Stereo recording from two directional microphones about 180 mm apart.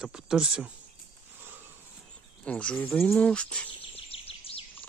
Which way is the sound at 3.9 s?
30° left (ahead or behind).